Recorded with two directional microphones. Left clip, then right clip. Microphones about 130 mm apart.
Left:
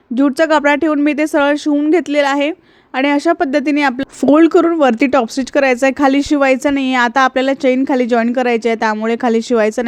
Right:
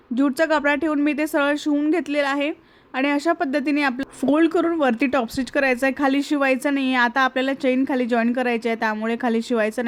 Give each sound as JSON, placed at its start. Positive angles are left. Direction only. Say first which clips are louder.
{"t": 0.2, "sound": "a woman's voice", "louder": "left 7 dB", "side_deg": 25}